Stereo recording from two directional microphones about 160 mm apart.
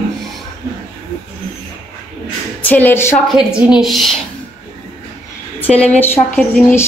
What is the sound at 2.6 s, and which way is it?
Speech, 10° left (ahead or behind).